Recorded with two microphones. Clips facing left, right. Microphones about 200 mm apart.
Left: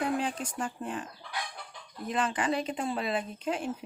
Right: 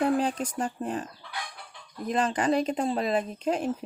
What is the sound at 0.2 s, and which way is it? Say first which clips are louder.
Speech: right 5 dB; 40° right (ahead or behind).